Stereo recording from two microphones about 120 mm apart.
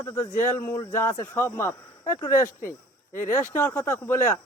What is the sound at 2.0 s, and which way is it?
Speech, 35° left (ahead or behind).